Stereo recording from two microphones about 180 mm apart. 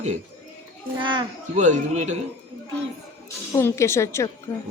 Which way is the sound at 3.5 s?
15° left (ahead or behind).